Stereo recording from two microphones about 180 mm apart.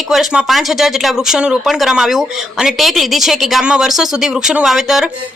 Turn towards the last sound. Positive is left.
turn(degrees=0)  # may be behind; listen again after turning